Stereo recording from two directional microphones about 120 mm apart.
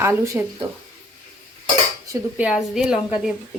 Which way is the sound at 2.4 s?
5° right (ahead or behind).